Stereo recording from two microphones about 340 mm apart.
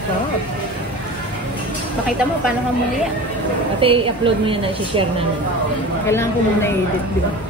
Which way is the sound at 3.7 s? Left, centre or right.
Centre.